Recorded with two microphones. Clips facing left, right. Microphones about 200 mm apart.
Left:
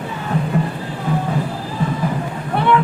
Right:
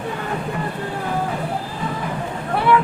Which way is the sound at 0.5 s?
45° left (ahead or behind).